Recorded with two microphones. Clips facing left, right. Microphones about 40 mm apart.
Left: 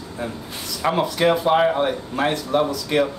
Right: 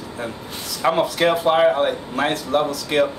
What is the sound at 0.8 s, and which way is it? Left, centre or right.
Speech, centre.